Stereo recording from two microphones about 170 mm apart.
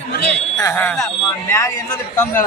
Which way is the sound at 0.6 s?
15° left (ahead or behind).